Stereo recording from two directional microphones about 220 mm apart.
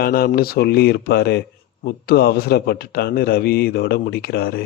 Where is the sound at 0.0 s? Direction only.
40° left (ahead or behind).